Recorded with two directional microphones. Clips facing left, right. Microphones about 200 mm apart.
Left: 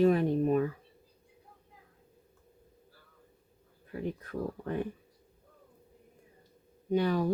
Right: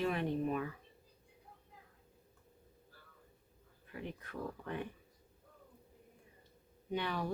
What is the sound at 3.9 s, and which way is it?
Speech, 40° left (ahead or behind).